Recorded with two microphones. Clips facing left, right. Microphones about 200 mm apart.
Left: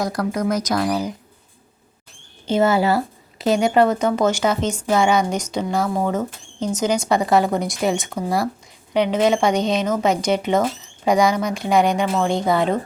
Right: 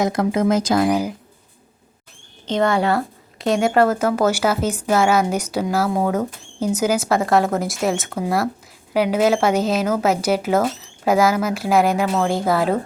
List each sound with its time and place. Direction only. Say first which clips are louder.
0.0 s speech: right 4 dB; 20° right (ahead or behind)
2.5 s a woman's voice: left 1 dB; 5° left (ahead or behind)